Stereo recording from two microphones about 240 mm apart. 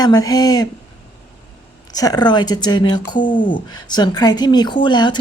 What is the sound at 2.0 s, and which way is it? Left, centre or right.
Speech, centre.